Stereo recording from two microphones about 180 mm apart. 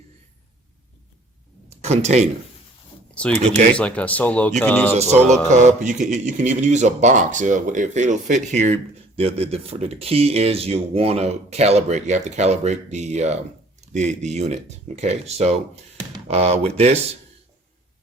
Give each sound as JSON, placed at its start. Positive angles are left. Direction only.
{"t": 1.8, "sound": "speech", "side_deg": -35}
{"t": 3.2, "sound": "speech", "side_deg": 5}
{"t": 4.9, "sound": "speech", "side_deg": -40}
{"t": 13.8, "sound": "a sound", "side_deg": -40}
{"t": 14.2, "sound": "speech", "side_deg": -40}